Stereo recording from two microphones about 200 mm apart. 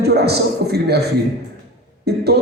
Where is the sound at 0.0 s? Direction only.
55° right (ahead or behind).